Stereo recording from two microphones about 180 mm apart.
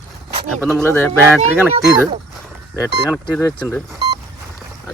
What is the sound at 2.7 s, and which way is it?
Speech, 5° right (ahead or behind).